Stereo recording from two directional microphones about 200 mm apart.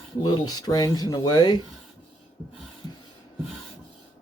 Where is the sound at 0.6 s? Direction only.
20° left (ahead or behind).